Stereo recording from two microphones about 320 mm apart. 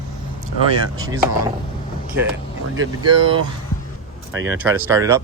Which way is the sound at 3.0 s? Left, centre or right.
Centre.